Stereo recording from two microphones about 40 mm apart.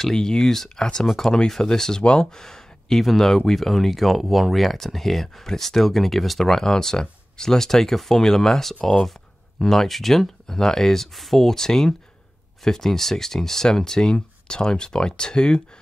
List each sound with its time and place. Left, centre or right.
0.1 s speech: centre
2.3 s a sound: centre
3.0 s speech: centre
6.5 s speech: centre